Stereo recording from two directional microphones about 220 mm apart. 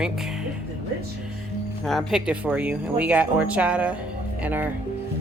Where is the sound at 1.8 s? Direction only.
Centre (ahead or behind).